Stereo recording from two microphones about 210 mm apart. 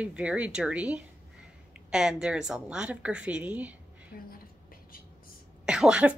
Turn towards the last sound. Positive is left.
turn(degrees=-5)  # may be behind; listen again after turning